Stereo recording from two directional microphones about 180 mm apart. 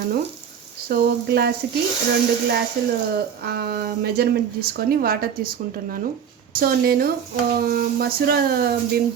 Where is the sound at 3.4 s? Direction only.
60° right (ahead or behind).